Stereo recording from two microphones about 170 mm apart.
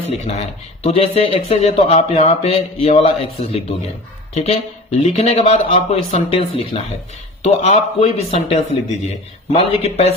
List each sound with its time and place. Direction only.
0.1 s speech: 35° left (ahead or behind)